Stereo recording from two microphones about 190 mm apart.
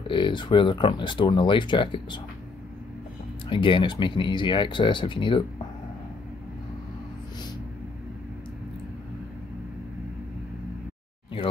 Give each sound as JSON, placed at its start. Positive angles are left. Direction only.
{"t": 0.1, "sound": "speech", "side_deg": 25}
{"t": 3.4, "sound": "speech", "side_deg": 25}